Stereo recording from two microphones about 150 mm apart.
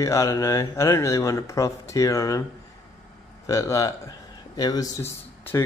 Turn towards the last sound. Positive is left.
turn(degrees=15)  # may be behind; listen again after turning